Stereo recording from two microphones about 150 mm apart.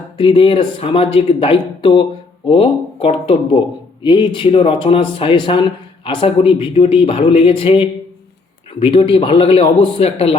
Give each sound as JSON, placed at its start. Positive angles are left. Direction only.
{"t": 0.2, "sound": "speech", "side_deg": 35}